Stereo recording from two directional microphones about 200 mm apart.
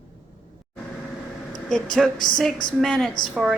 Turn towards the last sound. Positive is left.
turn(degrees=-5)  # may be behind; listen again after turning